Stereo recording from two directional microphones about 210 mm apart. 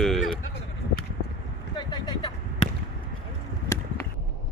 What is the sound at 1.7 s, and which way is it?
Vehicle, 20° left (ahead or behind).